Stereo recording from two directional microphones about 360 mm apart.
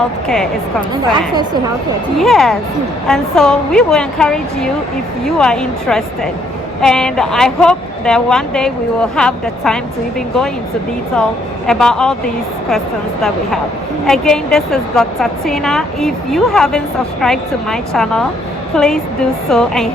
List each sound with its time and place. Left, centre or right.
0.3 s speech: centre
2.1 s speech: centre
11.1 s speech: centre
14.1 s speech: centre